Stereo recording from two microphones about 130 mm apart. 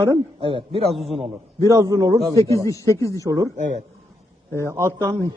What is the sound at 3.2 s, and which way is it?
Speech, 25° right (ahead or behind).